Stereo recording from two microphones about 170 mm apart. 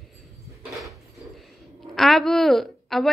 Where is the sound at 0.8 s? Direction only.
Centre (ahead or behind).